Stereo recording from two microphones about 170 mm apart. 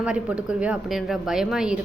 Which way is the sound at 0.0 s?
5° right (ahead or behind).